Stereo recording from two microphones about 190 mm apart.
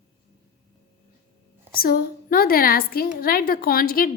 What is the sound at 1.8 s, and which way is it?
A woman's voice, 50° left (ahead or behind).